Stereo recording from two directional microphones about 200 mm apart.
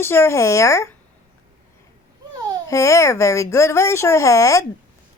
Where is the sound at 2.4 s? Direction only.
20° right (ahead or behind).